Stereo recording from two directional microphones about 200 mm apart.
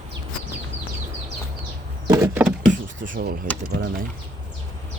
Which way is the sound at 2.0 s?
15° right (ahead or behind).